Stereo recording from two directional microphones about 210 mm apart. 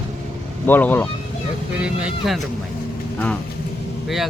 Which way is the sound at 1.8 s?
5° right (ahead or behind).